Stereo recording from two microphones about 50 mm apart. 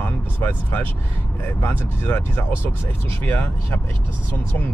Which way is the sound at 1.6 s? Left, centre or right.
Left.